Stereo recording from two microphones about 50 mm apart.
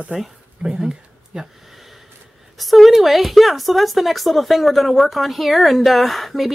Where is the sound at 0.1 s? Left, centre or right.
Centre.